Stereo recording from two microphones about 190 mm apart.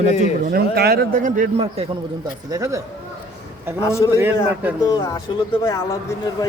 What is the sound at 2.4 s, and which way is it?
Speech, 15° right (ahead or behind).